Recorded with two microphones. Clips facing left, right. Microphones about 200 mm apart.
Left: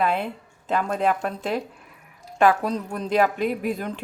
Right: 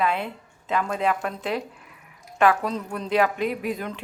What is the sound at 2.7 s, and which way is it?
Speech, 40° left (ahead or behind).